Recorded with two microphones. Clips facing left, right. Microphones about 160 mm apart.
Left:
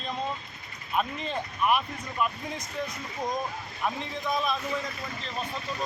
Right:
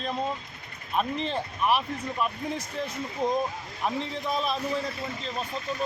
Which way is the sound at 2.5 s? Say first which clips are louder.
Right 2 dB; 30° right (ahead or behind).